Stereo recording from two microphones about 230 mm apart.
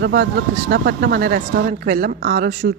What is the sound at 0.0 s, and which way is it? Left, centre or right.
A woman's voice, right.